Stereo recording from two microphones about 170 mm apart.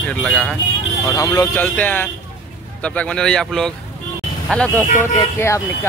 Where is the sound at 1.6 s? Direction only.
10° left (ahead or behind).